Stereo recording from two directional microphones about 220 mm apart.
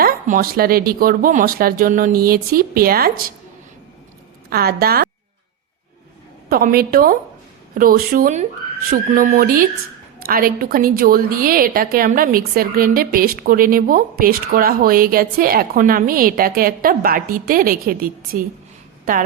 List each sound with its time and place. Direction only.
0.0 s a woman's voice: 40° right (ahead or behind)
4.4 s a woman's voice: 45° right (ahead or behind)
6.5 s a woman's voice: 40° right (ahead or behind)